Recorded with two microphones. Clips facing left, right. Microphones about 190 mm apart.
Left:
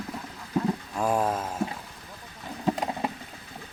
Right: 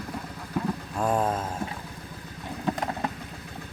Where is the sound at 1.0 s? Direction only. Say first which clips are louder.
Even; 5° left (ahead or behind).